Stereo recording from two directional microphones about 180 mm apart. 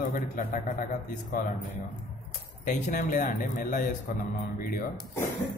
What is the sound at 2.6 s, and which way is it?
Speech, 45° left (ahead or behind).